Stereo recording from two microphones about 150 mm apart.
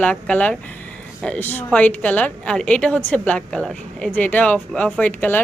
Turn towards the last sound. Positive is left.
turn(degrees=10)  # may be behind; listen again after turning